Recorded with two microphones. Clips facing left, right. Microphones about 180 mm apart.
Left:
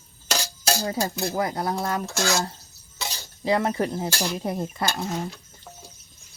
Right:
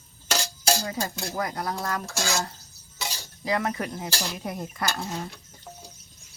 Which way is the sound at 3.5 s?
30° left (ahead or behind).